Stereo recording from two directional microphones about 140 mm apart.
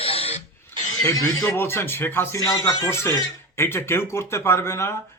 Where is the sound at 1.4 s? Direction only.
15° left (ahead or behind).